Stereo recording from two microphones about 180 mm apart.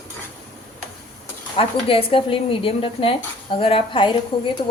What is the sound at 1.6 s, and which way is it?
Speech, 30° left (ahead or behind).